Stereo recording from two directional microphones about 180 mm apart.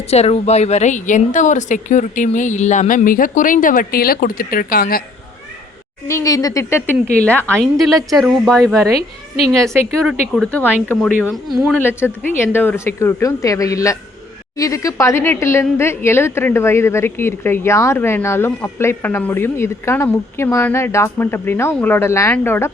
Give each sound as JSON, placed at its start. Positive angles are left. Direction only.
{"t": 0.1, "sound": "a woman's voice", "side_deg": 35}
{"t": 6.1, "sound": "a woman's voice", "side_deg": 20}
{"t": 9.0, "sound": "a woman's voice", "side_deg": 35}
{"t": 9.6, "sound": "a woman's voice", "side_deg": 0}